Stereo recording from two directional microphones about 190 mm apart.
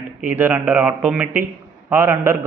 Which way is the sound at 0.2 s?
10° right (ahead or behind).